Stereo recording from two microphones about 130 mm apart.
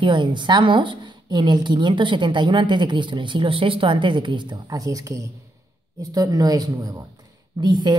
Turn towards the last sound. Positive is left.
turn(degrees=-35)  # may be behind; listen again after turning